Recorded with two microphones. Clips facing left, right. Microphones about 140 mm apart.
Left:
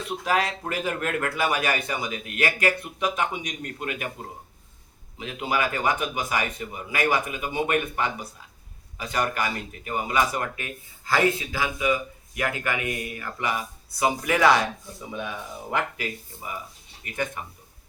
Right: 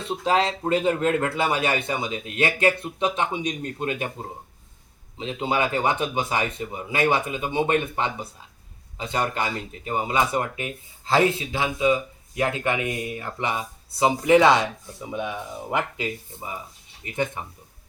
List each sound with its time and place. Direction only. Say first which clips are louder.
0.0 s speech: right 3 dB; 25° right (ahead or behind)